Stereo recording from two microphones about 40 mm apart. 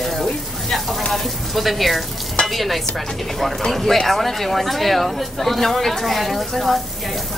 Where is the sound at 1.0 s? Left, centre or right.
Centre.